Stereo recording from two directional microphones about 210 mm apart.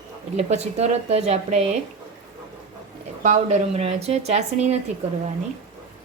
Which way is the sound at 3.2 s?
30° right (ahead or behind).